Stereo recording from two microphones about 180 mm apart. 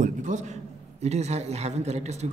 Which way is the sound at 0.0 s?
45° right (ahead or behind).